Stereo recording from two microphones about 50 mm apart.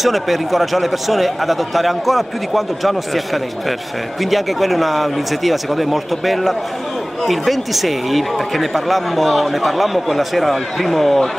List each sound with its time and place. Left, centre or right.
0.0 s speech: centre
4.2 s speech: centre